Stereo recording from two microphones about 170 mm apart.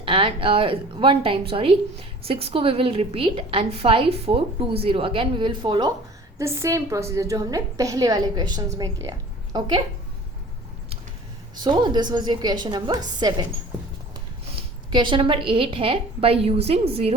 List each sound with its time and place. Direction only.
0.0 s a woman's voice: 30° right (ahead or behind)
6.4 s a woman's voice: 15° right (ahead or behind)
11.6 s a woman's voice: 25° right (ahead or behind)
14.9 s a woman's voice: 30° right (ahead or behind)